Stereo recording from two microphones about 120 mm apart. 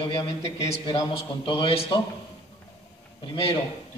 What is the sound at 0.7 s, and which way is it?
A man's voice, 55° left (ahead or behind).